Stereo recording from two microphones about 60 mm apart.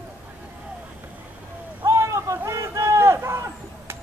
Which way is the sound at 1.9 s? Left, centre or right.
Right.